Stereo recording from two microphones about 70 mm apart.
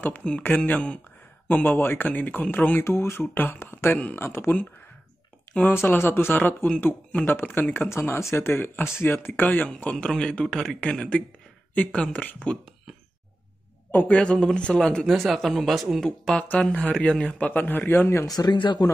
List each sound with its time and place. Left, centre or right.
0.2 s a man's voice: centre
2.8 s speech: left
5.6 s speech: left
7.9 s a man's voice: left
13.9 s a man's voice: centre
15.0 s speech: centre
16.1 s a man's voice: centre; by 18.2 s left
18.2 s speech: left